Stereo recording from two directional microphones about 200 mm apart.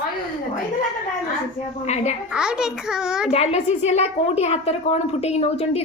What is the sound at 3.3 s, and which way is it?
A woman's voice, 30° left (ahead or behind).